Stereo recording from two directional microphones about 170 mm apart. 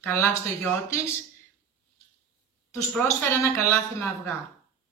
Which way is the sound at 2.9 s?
10° left (ahead or behind).